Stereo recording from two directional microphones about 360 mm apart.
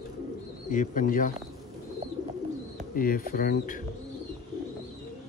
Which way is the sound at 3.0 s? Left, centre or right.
Left.